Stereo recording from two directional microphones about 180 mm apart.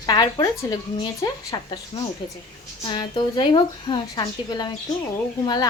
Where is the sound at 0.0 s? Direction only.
20° left (ahead or behind).